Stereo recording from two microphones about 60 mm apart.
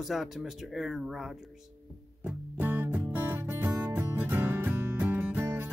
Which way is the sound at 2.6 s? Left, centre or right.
Right.